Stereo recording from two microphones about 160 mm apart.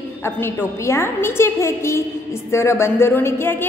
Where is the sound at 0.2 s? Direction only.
15° left (ahead or behind).